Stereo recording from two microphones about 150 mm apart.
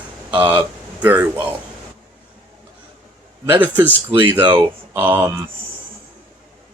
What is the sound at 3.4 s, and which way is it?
Speech, 15° right (ahead or behind).